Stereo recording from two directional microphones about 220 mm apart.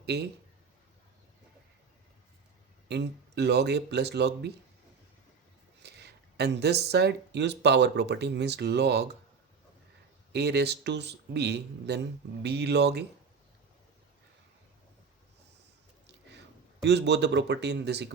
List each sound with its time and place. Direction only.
0.0 s a man's voice: 50° right (ahead or behind)
2.9 s speech: 50° right (ahead or behind)
5.8 s speech: 50° right (ahead or behind)
10.3 s speech: 50° right (ahead or behind)
16.8 s speech: 50° right (ahead or behind)